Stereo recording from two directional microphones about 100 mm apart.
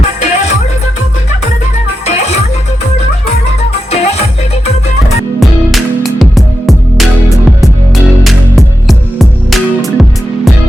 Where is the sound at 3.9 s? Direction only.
90° left.